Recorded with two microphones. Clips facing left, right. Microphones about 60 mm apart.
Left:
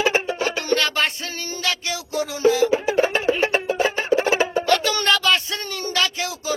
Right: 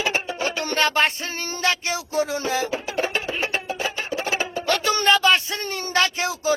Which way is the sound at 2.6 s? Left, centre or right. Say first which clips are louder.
Left 6 dB; left.